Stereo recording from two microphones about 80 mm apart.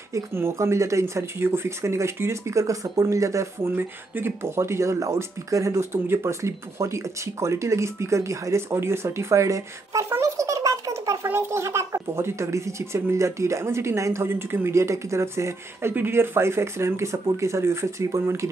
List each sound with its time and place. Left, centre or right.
0.1 s speech: right
3.7 s speech: right
10.2 s a sound: right
11.2 s speech: right